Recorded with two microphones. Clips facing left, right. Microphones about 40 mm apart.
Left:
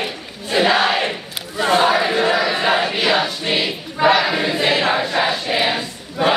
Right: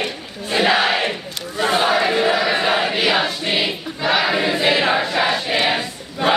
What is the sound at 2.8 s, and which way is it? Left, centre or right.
Choir, centre.